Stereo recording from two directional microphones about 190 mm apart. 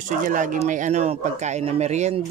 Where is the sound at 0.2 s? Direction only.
45° right (ahead or behind).